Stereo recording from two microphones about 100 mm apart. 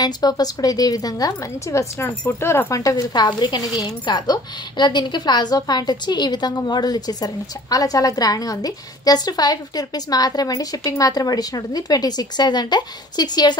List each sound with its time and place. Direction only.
0.0 s speech: 40° left (ahead or behind); by 2.8 s 25° left (ahead or behind)
2.8 s speech: 40° left (ahead or behind)